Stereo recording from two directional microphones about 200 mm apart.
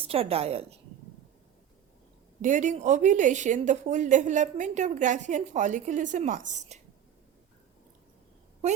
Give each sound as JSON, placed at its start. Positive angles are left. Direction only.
{"t": 0.0, "sound": "a woman's voice", "side_deg": -30}
{"t": 2.4, "sound": "a woman's voice", "side_deg": -40}